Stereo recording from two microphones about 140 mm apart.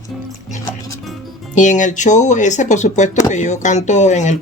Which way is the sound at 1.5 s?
65° left (ahead or behind).